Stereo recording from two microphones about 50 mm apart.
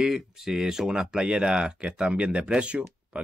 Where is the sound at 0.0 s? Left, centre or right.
Centre.